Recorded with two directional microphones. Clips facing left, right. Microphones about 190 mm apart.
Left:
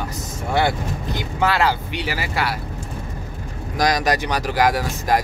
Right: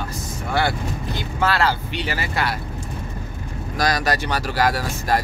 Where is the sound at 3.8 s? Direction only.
15° left (ahead or behind).